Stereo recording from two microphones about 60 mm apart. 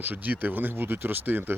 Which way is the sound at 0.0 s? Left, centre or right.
Right.